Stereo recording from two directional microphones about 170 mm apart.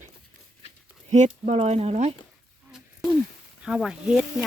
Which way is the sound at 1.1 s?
45° right (ahead or behind).